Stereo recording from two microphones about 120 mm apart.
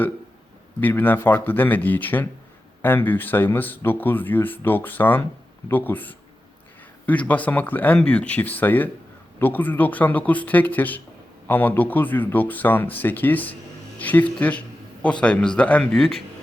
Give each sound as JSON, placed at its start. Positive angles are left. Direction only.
{"t": 0.8, "sound": "speech", "side_deg": 15}